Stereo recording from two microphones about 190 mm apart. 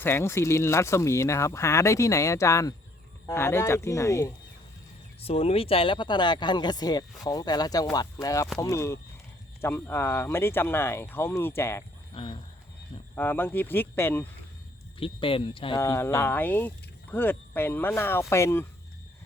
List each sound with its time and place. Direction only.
0.0 s speech: 15° left (ahead or behind)
5.2 s speech: 30° left (ahead or behind); by 11.8 s 15° left (ahead or behind)
12.1 s speech: 25° left (ahead or behind)
13.1 s speech: 10° left (ahead or behind)
14.9 s speech: 30° left (ahead or behind)
15.8 s speech: 15° left (ahead or behind)